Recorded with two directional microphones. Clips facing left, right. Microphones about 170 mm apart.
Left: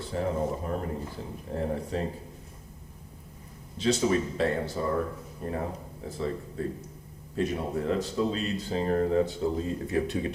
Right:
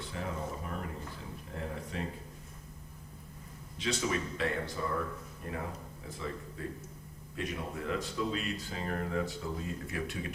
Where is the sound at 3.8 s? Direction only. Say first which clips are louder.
Left 8 dB; 35° left (ahead or behind).